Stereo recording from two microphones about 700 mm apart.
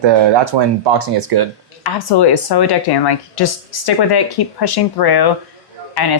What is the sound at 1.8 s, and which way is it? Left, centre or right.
Speech, left.